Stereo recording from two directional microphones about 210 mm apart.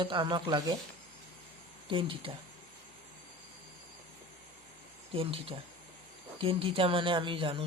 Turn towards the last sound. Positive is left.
turn(degrees=-25)  # may be behind; listen again after turning